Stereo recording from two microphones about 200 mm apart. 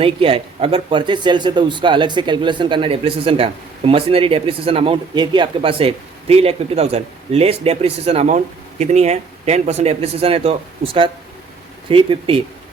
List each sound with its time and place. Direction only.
0.0 s speech: 25° right (ahead or behind)